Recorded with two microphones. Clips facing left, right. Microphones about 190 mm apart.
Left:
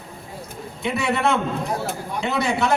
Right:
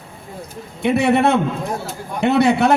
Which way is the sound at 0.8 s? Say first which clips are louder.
Right 7 dB; 60° right (ahead or behind).